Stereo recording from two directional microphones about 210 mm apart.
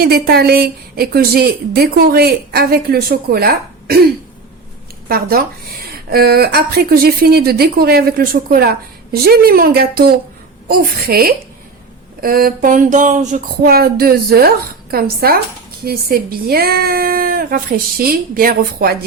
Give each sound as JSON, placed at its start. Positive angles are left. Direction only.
{"t": 0.0, "sound": "a woman's voice", "side_deg": -50}
{"t": 5.0, "sound": "a woman's voice", "side_deg": -45}